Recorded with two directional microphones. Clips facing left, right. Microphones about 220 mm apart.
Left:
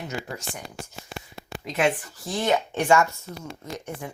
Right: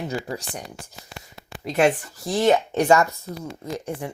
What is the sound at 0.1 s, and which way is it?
Speech, 35° right (ahead or behind).